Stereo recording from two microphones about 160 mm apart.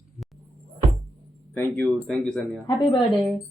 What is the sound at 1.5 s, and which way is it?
Speech, 15° left (ahead or behind).